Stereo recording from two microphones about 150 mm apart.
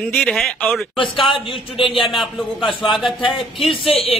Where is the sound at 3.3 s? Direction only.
35° left (ahead or behind).